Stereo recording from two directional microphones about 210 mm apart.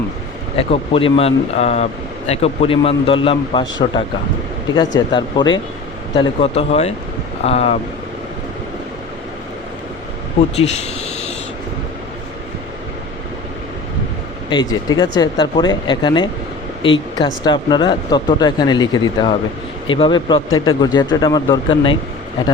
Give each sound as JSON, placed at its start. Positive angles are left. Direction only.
{"t": 0.5, "sound": "speech", "side_deg": 25}
{"t": 10.6, "sound": "a sound", "side_deg": 30}
{"t": 14.5, "sound": "speech", "side_deg": 20}